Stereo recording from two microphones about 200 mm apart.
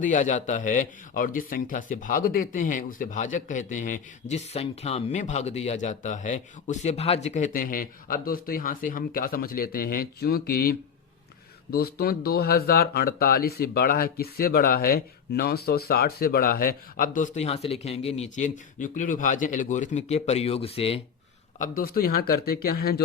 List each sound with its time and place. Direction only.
0.0 s a man's voice: 40° left (ahead or behind)
11.9 s speech: 50° left (ahead or behind); by 21.0 s 30° left (ahead or behind)
21.6 s speech: 45° left (ahead or behind)